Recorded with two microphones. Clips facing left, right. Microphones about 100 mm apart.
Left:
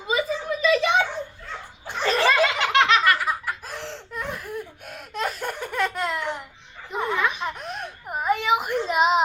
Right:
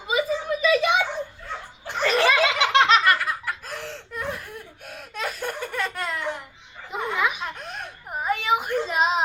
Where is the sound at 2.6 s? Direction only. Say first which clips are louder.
Right 1 dB; 20° right (ahead or behind).